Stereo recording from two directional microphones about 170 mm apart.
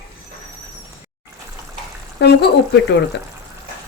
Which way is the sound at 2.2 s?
75° left (ahead or behind).